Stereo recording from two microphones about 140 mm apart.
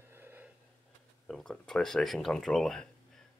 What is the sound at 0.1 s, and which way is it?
Wheeze, 15° right (ahead or behind).